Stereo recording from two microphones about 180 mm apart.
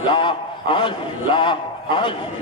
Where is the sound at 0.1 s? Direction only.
30° left (ahead or behind).